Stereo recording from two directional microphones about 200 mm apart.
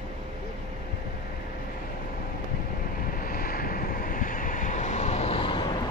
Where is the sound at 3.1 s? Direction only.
45° left (ahead or behind); by 5.8 s 25° left (ahead or behind).